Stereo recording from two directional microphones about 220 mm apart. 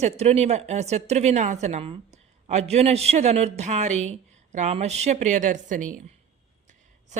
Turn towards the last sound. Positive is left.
turn(degrees=-35)  # may be behind; listen again after turning